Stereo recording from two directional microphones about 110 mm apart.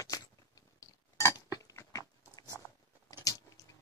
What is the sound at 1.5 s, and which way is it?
Biting, 35° left (ahead or behind).